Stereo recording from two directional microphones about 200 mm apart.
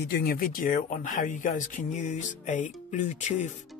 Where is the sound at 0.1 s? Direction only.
50° left (ahead or behind).